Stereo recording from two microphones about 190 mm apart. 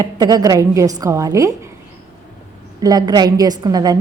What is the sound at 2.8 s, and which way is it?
A woman's voice, 20° right (ahead or behind).